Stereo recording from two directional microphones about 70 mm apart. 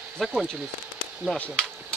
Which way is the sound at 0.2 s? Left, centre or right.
Centre.